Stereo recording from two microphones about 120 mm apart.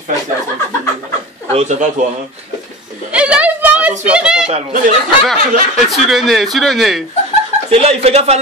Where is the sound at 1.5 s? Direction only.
70° right (ahead or behind).